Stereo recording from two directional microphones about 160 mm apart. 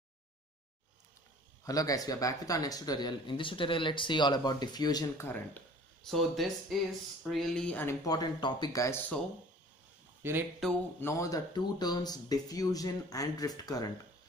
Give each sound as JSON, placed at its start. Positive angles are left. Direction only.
{"t": 1.6, "sound": "speech", "side_deg": 20}
{"t": 6.0, "sound": "speech", "side_deg": 0}
{"t": 8.0, "sound": "speech", "side_deg": 25}
{"t": 10.2, "sound": "speech", "side_deg": -15}
{"t": 10.6, "sound": "speech", "side_deg": 0}
{"t": 11.0, "sound": "speech", "side_deg": 15}